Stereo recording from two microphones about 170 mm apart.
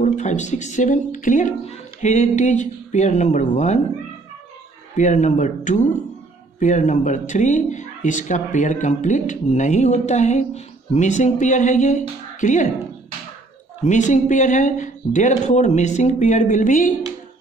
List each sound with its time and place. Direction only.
0.0 s speech: 45° left (ahead or behind)
4.9 s speech: 45° left (ahead or behind)
13.8 s speech: 45° left (ahead or behind)